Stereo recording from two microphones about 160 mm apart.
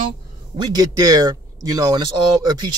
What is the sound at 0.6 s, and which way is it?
A man's voice, 25° right (ahead or behind).